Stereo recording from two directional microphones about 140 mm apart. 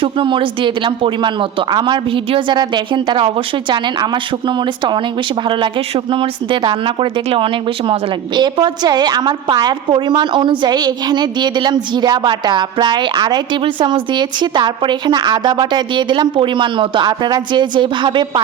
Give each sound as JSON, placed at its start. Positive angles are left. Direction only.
{"t": 0.0, "sound": "a woman's voice", "side_deg": -40}